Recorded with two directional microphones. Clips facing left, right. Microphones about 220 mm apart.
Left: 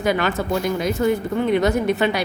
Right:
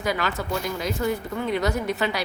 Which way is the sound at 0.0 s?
25° left (ahead or behind).